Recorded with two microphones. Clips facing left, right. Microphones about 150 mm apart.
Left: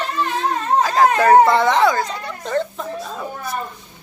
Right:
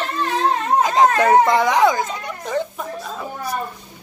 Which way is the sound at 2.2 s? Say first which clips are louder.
Left 1 dB; 10° right (ahead or behind).